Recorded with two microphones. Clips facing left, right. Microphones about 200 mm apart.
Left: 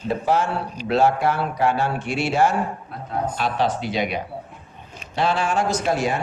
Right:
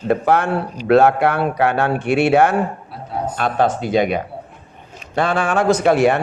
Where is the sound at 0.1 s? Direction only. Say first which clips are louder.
Right 5 dB; 60° right (ahead or behind).